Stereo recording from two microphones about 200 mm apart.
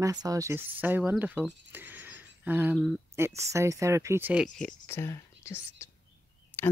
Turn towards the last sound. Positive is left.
turn(degrees=10)  # may be behind; listen again after turning